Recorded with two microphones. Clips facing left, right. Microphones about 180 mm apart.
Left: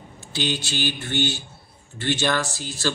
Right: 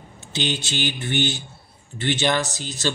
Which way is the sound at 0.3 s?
20° right (ahead or behind).